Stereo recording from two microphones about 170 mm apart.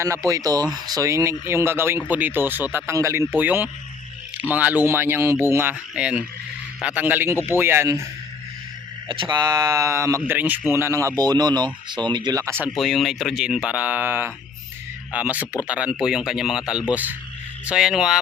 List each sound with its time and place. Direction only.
0.0 s speech: 20° right (ahead or behind)
9.0 s speech: 30° right (ahead or behind)
12.8 s speech: centre (ahead or behind)